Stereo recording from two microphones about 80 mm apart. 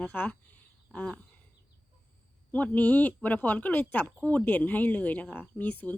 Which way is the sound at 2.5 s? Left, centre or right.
Centre.